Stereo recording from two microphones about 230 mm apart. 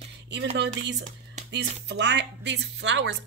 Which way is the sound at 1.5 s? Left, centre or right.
Right.